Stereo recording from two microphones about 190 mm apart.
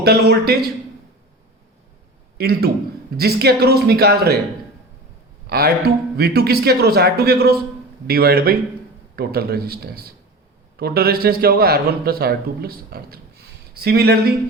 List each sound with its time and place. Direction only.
0.0 s speech: 55° right (ahead or behind)
2.4 s speech: 55° right (ahead or behind)
5.5 s a man's voice: 55° right (ahead or behind)